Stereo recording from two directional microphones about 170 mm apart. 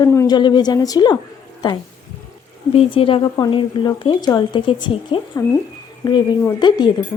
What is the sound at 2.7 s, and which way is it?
Speech, 35° left (ahead or behind).